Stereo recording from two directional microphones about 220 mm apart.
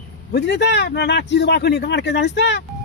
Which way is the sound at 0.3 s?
50° left (ahead or behind).